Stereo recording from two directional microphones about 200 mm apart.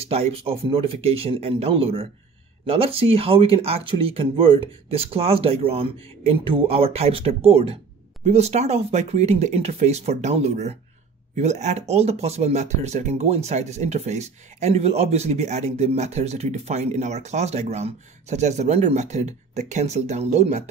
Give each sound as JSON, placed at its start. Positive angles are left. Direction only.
{"t": 0.1, "sound": "speech", "side_deg": -30}